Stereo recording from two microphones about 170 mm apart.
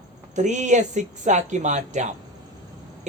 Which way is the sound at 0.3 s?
45° right (ahead or behind).